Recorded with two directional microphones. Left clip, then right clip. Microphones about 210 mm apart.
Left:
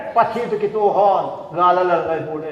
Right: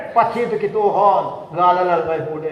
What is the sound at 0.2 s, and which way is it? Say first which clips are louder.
A man's voice: right 1 dB; 20° right (ahead or behind).